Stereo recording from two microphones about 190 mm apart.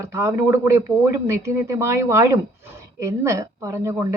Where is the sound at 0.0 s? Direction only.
15° right (ahead or behind).